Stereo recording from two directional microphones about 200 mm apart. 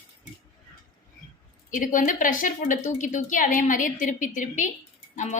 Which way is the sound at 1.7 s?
40° left (ahead or behind).